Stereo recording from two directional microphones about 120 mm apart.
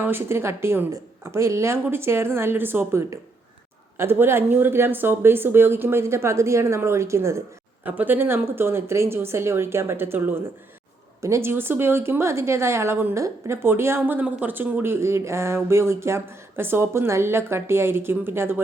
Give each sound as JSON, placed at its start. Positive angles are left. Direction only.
{"t": 0.0, "sound": "speech", "side_deg": -20}